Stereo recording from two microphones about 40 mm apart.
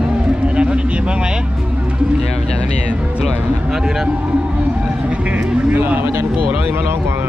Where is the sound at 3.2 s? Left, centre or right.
Centre.